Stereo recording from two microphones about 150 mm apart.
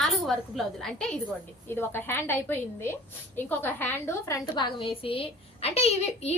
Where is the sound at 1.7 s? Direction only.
15° left (ahead or behind).